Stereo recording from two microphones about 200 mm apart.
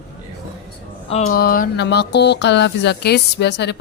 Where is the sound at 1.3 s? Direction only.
45° left (ahead or behind).